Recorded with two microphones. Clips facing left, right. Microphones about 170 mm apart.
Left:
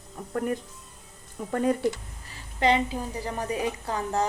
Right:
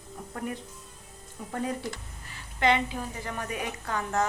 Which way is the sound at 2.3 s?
35° left (ahead or behind).